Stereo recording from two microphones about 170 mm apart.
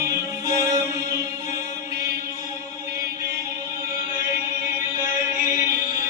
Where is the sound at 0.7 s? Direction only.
20° right (ahead or behind).